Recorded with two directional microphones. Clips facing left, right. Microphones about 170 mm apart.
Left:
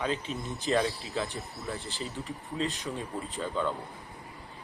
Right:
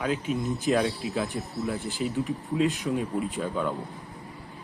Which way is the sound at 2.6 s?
15° right (ahead or behind).